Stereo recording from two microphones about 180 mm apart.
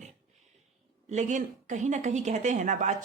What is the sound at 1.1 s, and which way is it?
Speech, 40° right (ahead or behind).